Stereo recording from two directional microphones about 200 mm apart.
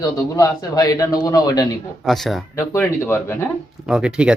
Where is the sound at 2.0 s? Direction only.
Centre (ahead or behind).